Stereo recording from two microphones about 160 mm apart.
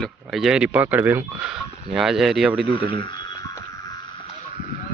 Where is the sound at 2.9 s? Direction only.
30° left (ahead or behind).